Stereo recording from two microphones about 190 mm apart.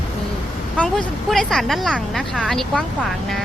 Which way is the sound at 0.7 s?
5° left (ahead or behind).